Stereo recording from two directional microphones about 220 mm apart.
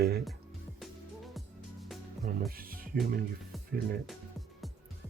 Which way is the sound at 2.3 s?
40° right (ahead or behind).